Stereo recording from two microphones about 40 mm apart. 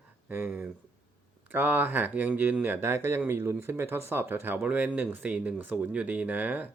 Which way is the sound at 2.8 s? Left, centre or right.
Right.